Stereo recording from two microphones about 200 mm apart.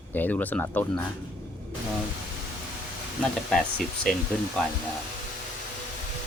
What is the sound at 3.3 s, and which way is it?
Speech, centre (ahead or behind).